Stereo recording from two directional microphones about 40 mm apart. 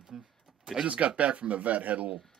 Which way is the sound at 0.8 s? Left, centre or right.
Right.